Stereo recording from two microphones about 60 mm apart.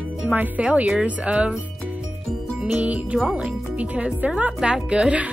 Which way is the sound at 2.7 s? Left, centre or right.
Right.